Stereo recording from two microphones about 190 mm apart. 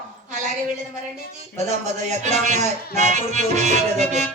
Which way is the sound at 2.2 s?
35° right (ahead or behind).